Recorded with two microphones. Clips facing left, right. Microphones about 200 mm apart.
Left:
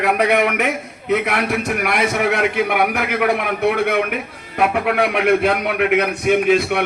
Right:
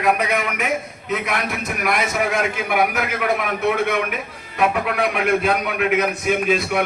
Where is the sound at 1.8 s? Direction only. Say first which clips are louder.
Right 1 dB; 65° left (ahead or behind).